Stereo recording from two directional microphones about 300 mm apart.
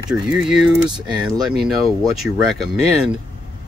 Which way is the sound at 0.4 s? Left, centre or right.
Centre.